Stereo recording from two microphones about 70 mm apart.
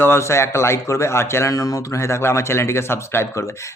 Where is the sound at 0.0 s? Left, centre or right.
Left.